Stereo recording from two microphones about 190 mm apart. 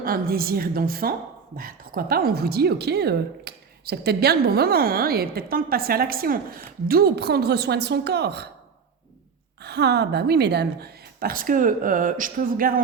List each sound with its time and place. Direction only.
0.0 s a woman's voice: 50° right (ahead or behind)
9.6 s a woman's voice: 60° right (ahead or behind)